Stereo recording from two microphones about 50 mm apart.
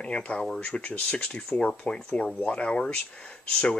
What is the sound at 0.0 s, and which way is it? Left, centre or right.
Speech, left.